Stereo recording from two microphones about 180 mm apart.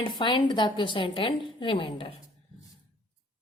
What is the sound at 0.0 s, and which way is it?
A woman's voice, 25° left (ahead or behind).